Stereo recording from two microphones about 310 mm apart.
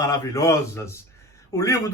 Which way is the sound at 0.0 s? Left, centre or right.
Centre.